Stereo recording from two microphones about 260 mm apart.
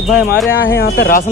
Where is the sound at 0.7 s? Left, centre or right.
Left.